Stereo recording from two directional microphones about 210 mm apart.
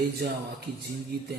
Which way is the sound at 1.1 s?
50° right (ahead or behind).